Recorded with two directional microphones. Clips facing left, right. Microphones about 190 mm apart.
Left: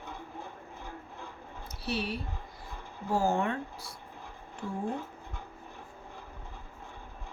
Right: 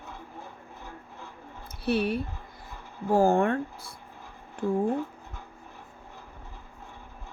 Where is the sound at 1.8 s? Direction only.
55° right (ahead or behind).